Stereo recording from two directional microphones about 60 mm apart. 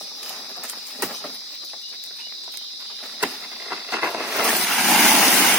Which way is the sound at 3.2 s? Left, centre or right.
Right.